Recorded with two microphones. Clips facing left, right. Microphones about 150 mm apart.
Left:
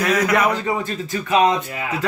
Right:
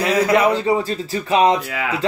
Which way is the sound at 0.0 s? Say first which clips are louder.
Right 2 dB; 30° right (ahead or behind).